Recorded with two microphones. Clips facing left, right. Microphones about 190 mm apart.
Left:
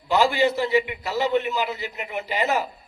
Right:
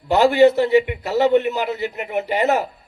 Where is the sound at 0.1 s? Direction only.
55° right (ahead or behind).